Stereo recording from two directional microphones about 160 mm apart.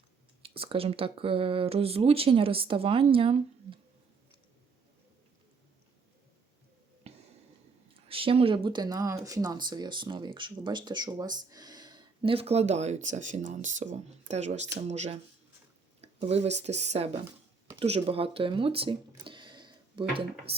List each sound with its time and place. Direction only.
0.4 s speech: 35° right (ahead or behind)
7.1 s a sound: 40° right (ahead or behind)
8.0 s speech: 35° right (ahead or behind)